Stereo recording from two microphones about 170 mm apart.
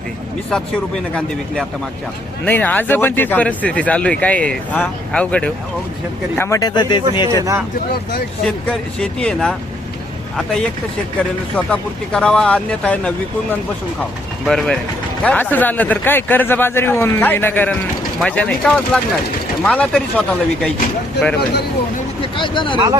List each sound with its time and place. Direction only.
0.5 s speech: 5° left (ahead or behind); by 7.0 s 25° left (ahead or behind)
7.3 s speech: 20° right (ahead or behind)
9.0 s speech: 5° left (ahead or behind)
22.4 s speech: 30° left (ahead or behind)